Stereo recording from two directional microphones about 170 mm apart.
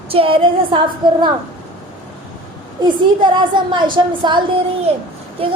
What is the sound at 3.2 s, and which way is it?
Speech, 30° right (ahead or behind).